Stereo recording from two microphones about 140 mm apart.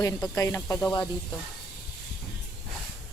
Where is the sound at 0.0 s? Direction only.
25° left (ahead or behind).